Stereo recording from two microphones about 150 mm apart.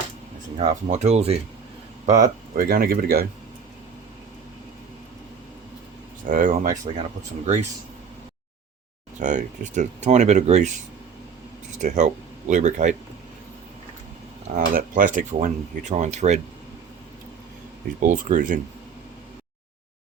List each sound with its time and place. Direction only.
0.5 s speech: 50° right (ahead or behind)
2.0 s speech: 55° right (ahead or behind); by 3.2 s 85° right
6.2 s speech: 60° right (ahead or behind)
7.2 s speech: 50° right (ahead or behind)
9.1 s speech: 55° right (ahead or behind)
11.8 s speech: 50° right (ahead or behind)
14.6 s speech: 65° right (ahead or behind)
18.1 s speech: 60° right (ahead or behind)